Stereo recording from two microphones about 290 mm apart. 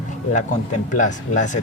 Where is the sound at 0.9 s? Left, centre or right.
Left.